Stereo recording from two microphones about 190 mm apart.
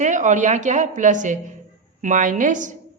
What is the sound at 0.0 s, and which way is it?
A woman's voice, 40° right (ahead or behind).